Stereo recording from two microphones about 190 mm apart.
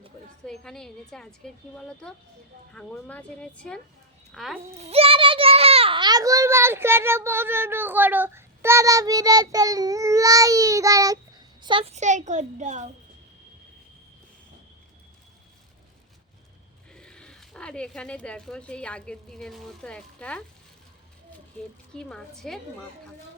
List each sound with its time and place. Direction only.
0.4 s a woman's voice: 5° left (ahead or behind)
4.7 s a child's voice: 30° right (ahead or behind)
16.9 s speech: 5° left (ahead or behind)
21.9 s a woman's voice: 5° left (ahead or behind)